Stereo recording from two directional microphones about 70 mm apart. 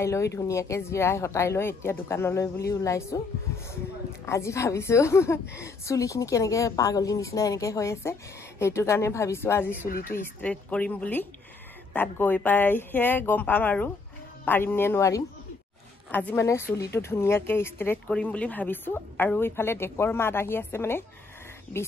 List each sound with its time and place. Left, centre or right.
0.0 s a woman's voice: left
2.4 s a woman's voice: left
4.3 s a woman's voice: left
10.4 s a woman's voice: centre; by 15.0 s left
16.1 s a woman's voice: left
16.3 s a woman's voice: left